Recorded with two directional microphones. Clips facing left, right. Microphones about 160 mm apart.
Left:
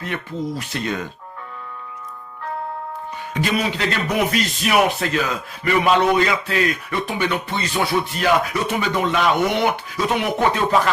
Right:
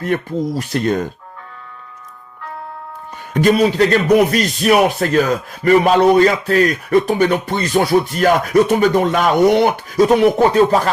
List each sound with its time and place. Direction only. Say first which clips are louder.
0.0 s speech: right 7 dB; 45° right (ahead or behind)
3.6 s speech: right 9 dB; 40° right (ahead or behind)